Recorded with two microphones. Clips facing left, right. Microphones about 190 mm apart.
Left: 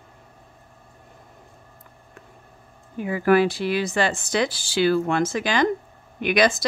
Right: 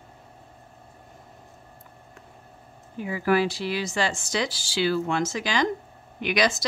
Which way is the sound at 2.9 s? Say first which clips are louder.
Left 5 dB; 55° left (ahead or behind).